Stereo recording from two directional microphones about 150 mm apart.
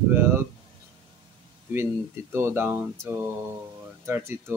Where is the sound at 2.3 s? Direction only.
15° right (ahead or behind).